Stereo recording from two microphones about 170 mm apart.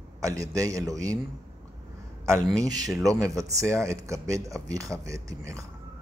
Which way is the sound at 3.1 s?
5° left (ahead or behind).